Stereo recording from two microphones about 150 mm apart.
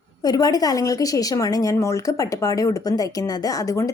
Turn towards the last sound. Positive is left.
turn(degrees=20)  # may be behind; listen again after turning